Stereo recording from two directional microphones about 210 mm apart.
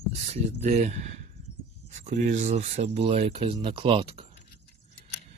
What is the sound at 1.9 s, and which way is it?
Speech, 35° right (ahead or behind).